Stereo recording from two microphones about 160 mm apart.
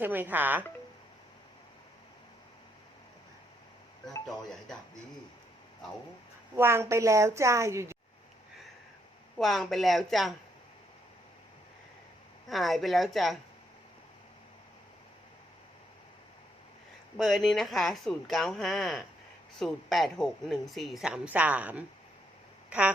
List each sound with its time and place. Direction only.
0.0 s a woman's voice: 10° right (ahead or behind)
6.6 s a woman's voice: 15° right (ahead or behind)
9.4 s speech: centre (ahead or behind)
12.5 s speech: centre (ahead or behind)
17.2 s speech: centre (ahead or behind)